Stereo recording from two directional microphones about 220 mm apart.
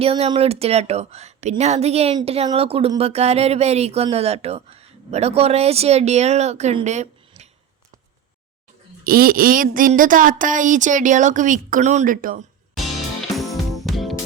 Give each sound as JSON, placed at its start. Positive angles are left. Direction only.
{"t": 0.0, "sound": "a woman's voice", "side_deg": -25}
{"t": 9.0, "sound": "speech", "side_deg": -40}
{"t": 13.3, "sound": "music", "side_deg": 0}